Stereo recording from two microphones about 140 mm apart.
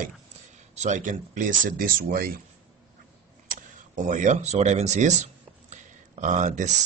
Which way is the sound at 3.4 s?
70° right (ahead or behind).